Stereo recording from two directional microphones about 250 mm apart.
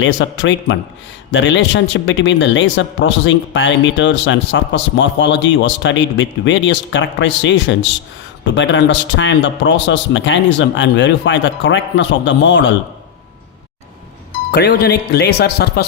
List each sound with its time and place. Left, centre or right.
0.0 s a man's voice: left
14.5 s speech: left